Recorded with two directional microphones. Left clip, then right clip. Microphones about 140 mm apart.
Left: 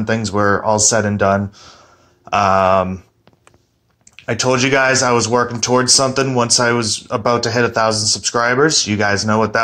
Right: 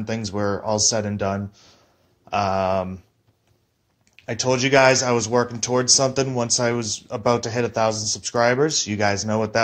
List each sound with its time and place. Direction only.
0.0 s speech: 20° right (ahead or behind)
4.3 s speech: 15° right (ahead or behind)